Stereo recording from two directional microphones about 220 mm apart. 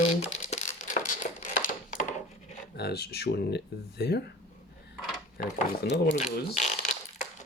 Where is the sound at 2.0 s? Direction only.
35° left (ahead or behind).